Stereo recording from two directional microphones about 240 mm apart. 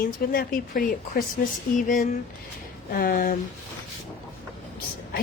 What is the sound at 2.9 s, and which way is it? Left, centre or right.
Speech, left.